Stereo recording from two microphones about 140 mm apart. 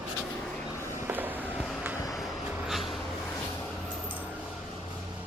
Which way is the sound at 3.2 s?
20° left (ahead or behind).